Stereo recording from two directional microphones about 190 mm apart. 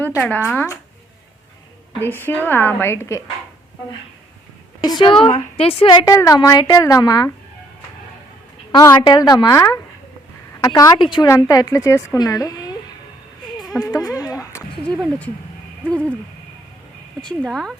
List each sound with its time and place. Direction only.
0.0 s a woman's voice: 10° left (ahead or behind)
2.0 s a woman's voice: 10° left (ahead or behind)
4.8 s a woman's voice: 25° left (ahead or behind)
8.7 s a woman's voice: 15° left (ahead or behind)
13.8 s a sound: 15° left (ahead or behind)
17.4 s speech: centre (ahead or behind)